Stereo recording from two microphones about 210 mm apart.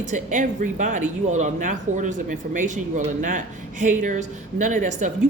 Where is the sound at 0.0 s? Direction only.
35° right (ahead or behind).